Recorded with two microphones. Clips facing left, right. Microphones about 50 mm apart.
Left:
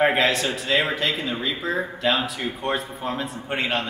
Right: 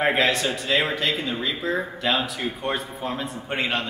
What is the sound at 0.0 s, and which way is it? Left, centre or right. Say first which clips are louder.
Speech: left 1 dB; centre.